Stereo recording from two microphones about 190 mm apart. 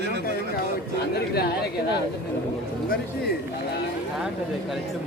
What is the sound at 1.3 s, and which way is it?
Speech, 55° left (ahead or behind).